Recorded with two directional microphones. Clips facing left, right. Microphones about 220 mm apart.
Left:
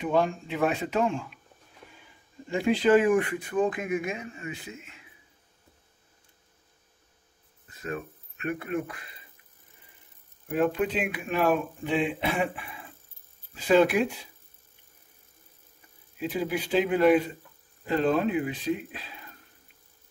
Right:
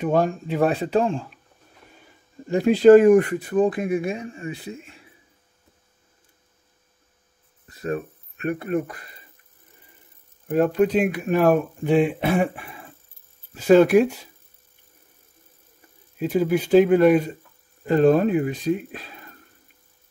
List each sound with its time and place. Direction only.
0.0 s speech: 45° right (ahead or behind)
2.4 s speech: 40° right (ahead or behind)
7.6 s speech: 40° right (ahead or behind)
10.5 s speech: 40° right (ahead or behind)
13.7 s speech: 45° right (ahead or behind)
16.2 s speech: 45° right (ahead or behind)